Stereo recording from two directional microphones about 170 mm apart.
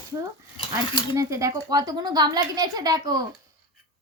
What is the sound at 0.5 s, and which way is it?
Cutlery, 25° left (ahead or behind).